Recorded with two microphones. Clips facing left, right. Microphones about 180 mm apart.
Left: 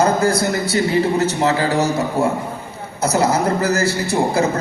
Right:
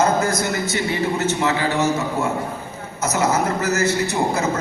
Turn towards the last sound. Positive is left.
turn(degrees=30)  # may be behind; listen again after turning